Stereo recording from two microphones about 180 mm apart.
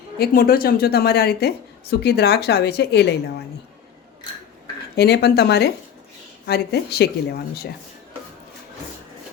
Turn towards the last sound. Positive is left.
turn(degrees=60)  # may be behind; listen again after turning